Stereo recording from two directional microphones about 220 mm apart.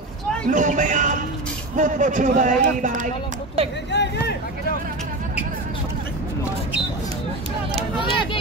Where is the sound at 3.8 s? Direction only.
50° left (ahead or behind).